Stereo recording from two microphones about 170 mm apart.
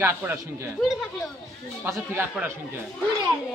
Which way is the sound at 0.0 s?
15° right (ahead or behind).